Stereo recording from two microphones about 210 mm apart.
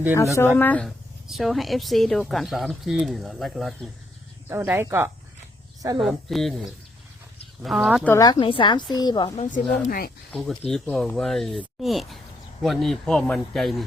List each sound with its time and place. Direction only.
0.3 s speech: 10° left (ahead or behind)
4.4 s speech: 10° right (ahead or behind)
6.0 s speech: centre (ahead or behind)
8.1 s a woman's voice: 20° left (ahead or behind)
9.6 s speech: centre (ahead or behind)
9.8 s speech: 45° left (ahead or behind)
10.3 s speech: centre (ahead or behind)